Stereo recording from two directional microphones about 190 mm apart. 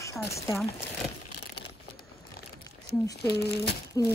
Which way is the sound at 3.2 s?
60° left (ahead or behind).